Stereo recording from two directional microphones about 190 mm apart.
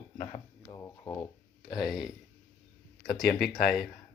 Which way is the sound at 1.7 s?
Centre (ahead or behind).